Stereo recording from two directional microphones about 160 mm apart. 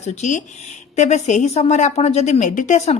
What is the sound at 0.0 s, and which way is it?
A woman's voice, 50° left (ahead or behind).